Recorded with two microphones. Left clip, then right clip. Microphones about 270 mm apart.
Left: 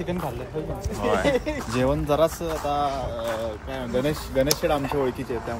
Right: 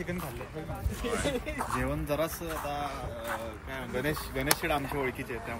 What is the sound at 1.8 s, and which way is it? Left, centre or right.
Speech, centre.